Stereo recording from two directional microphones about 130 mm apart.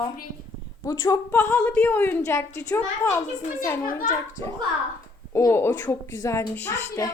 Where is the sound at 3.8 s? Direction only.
90° left.